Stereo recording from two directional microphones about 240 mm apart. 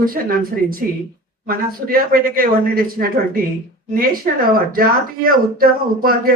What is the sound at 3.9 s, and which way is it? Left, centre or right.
Speech, right.